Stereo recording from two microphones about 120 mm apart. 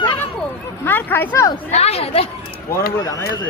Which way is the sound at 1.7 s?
60° left (ahead or behind).